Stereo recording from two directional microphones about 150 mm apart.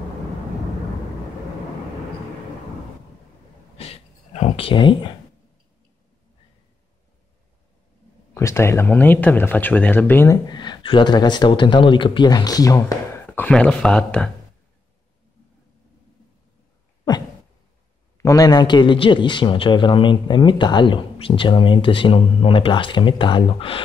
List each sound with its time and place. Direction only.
3.7 s a sound: 45° left (ahead or behind)
8.4 s speech: 20° left (ahead or behind)
10.5 s speech: 30° left (ahead or behind)
13.3 s speech: 10° left (ahead or behind)
18.1 s a man's voice: 20° left (ahead or behind)